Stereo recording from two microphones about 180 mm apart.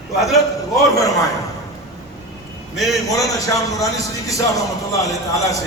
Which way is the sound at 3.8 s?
20° left (ahead or behind).